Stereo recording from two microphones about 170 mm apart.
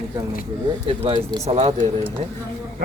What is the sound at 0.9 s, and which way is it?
Speech, 30° right (ahead or behind).